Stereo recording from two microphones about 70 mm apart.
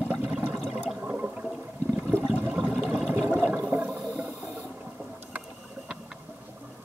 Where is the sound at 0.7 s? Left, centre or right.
Centre.